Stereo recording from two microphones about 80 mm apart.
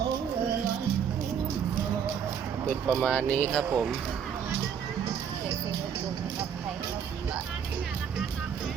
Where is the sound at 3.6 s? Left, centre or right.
Centre.